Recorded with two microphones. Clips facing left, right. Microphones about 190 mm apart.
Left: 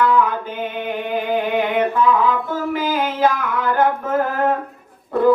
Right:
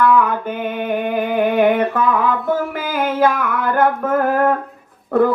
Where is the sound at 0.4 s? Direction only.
55° right (ahead or behind).